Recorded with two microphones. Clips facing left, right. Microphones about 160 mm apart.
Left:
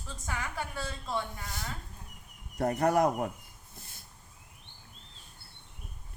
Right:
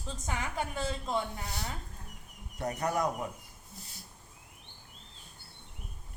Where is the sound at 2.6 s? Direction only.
55° left (ahead or behind).